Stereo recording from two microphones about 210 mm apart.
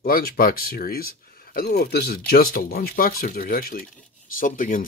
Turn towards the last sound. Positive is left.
turn(degrees=40)  # may be behind; listen again after turning